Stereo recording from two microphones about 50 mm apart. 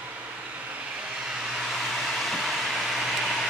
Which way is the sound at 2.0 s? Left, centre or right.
Centre.